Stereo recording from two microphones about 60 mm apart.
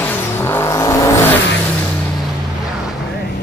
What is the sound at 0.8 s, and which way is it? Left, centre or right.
Vehicle, left.